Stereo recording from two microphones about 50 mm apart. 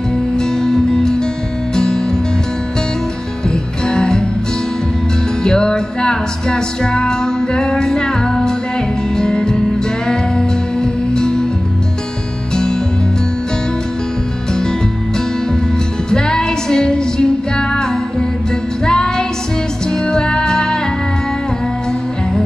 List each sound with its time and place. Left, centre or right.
0.4 s music: centre
3.4 s music: centre
5.4 s music: centre
14.5 s music: centre
16.1 s music: centre
18.9 s music: centre